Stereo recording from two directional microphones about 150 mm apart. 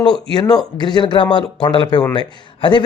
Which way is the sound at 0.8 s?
30° left (ahead or behind).